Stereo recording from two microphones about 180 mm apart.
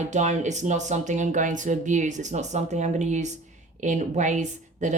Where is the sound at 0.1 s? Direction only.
40° right (ahead or behind).